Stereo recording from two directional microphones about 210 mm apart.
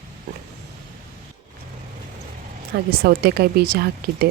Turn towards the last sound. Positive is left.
turn(degrees=-50)  # may be behind; listen again after turning